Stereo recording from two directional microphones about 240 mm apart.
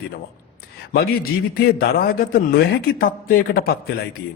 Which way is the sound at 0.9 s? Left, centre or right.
Left.